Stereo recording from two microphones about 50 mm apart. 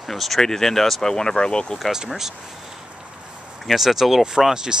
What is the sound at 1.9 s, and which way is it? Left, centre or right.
Speech, centre.